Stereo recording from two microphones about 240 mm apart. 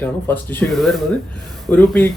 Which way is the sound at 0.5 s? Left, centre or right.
Centre.